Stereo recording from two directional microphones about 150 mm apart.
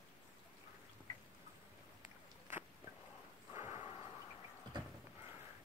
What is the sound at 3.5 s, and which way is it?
Snort, 45° left (ahead or behind).